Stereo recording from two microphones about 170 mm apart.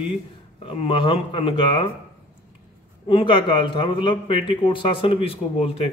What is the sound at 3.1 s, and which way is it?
Speech, 30° left (ahead or behind).